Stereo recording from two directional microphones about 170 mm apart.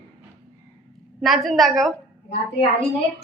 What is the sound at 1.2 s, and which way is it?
Speech, centre (ahead or behind).